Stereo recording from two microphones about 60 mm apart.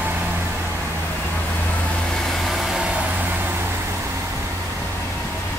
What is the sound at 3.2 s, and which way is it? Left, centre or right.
Vehicle, right.